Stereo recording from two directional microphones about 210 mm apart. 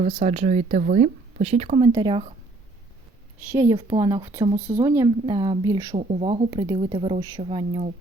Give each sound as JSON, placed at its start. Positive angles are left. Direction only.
{"t": 0.0, "sound": "speech", "side_deg": -30}
{"t": 1.9, "sound": "speech", "side_deg": -20}
{"t": 3.5, "sound": "speech", "side_deg": -15}
{"t": 6.0, "sound": "speech", "side_deg": -30}